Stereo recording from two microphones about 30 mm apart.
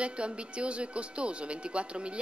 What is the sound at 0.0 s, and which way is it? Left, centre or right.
Speech, right.